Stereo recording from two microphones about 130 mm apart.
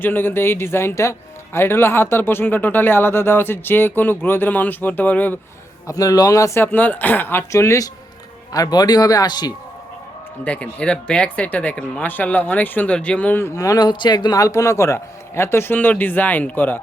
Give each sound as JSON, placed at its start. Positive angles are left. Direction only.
{"t": 0.0, "sound": "speech", "side_deg": 15}
{"t": 5.9, "sound": "a man's voice", "side_deg": 25}
{"t": 10.4, "sound": "speech", "side_deg": 10}
{"t": 13.6, "sound": "a man's voice", "side_deg": 30}